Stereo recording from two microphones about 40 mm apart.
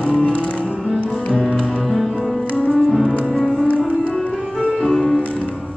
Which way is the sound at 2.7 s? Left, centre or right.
Centre.